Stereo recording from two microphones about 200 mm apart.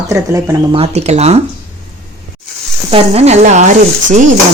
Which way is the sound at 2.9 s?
30° right (ahead or behind).